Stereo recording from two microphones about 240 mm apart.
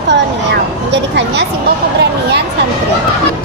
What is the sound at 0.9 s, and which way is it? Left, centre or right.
Speech, right.